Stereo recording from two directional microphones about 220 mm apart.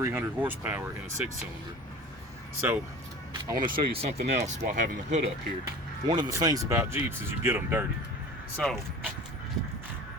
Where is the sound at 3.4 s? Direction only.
20° right (ahead or behind).